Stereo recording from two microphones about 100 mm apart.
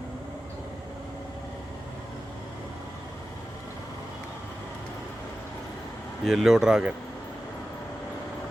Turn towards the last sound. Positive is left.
turn(degrees=-5)  # may be behind; listen again after turning